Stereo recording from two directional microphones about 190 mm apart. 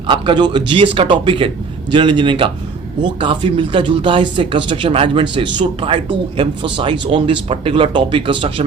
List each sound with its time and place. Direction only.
0.1 s speech: 25° right (ahead or behind)